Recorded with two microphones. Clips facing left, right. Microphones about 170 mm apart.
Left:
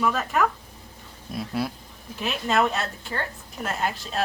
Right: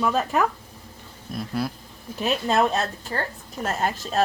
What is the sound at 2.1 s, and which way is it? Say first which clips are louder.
A woman's voice: right 2 dB; 35° right (ahead or behind).